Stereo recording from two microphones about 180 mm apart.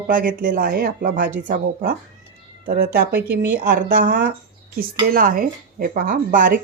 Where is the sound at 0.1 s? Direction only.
50° right (ahead or behind).